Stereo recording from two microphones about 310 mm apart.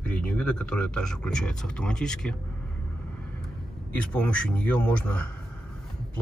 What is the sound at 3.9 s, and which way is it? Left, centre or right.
Speech, centre.